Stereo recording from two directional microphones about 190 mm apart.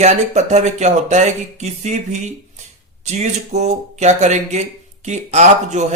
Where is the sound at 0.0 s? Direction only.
35° right (ahead or behind).